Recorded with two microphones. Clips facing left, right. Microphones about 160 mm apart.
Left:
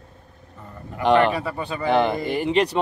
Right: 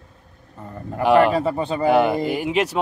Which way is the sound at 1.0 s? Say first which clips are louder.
Right 2 dB; 10° right (ahead or behind).